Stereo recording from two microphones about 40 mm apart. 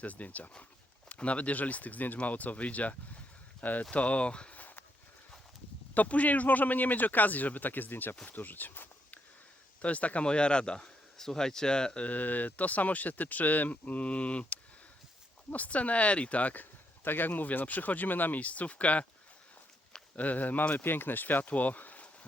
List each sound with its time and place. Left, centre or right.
0.0 s speech: left
5.9 s speech: left
9.8 s speech: left
10.2 s speech: left
11.2 s speech: centre
12.0 s speech: left
17.0 s speech: left
20.1 s speech: left
20.7 s speech: left